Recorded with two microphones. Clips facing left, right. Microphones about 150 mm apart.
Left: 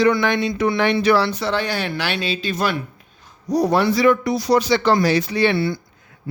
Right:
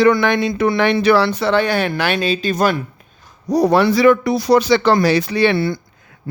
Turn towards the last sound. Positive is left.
turn(degrees=-50)  # may be behind; listen again after turning